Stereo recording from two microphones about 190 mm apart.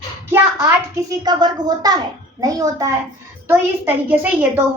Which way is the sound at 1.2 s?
20° right (ahead or behind).